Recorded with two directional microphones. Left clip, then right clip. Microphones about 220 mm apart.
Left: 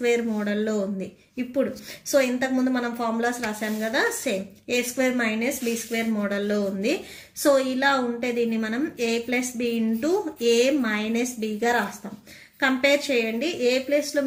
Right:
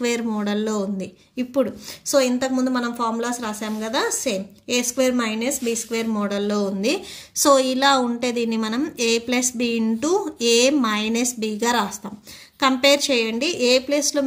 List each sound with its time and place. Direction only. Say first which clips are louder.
0.0 s a woman's voice: even; 45° right (ahead or behind)